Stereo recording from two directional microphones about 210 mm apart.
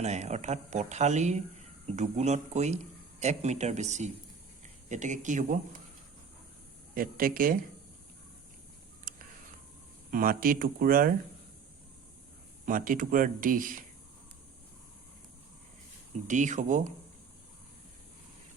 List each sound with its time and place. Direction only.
0.0 s speech: 30° right (ahead or behind)
6.9 s speech: 45° right (ahead or behind)
9.1 s a sound: 40° right (ahead or behind)
10.1 s speech: 40° right (ahead or behind)
12.6 s speech: 40° right (ahead or behind)
16.2 s speech: 35° right (ahead or behind)